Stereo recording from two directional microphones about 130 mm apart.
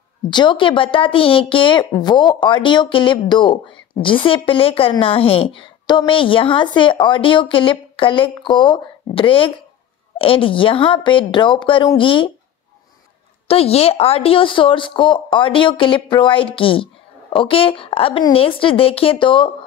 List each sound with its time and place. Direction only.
0.3 s a woman's voice: 35° left (ahead or behind)
13.5 s a woman's voice: 50° left (ahead or behind)